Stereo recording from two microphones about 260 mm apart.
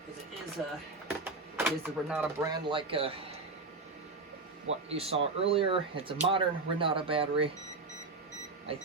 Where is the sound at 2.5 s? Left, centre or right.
Centre.